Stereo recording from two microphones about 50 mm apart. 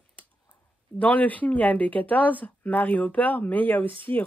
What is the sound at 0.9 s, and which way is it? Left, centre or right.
Speech, left.